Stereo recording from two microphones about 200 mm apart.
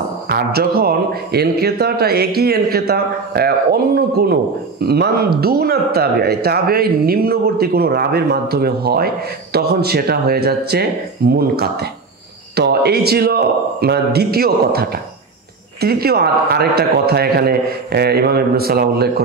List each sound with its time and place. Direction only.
0.3 s speech: 50° right (ahead or behind)